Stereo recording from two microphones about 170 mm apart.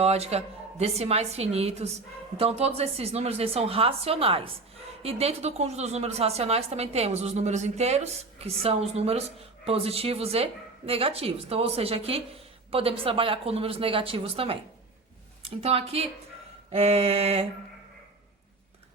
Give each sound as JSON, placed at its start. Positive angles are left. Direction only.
{"t": 0.0, "sound": "a woman's voice", "side_deg": -40}